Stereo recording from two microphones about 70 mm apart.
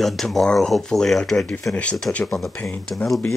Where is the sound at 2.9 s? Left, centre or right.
Left.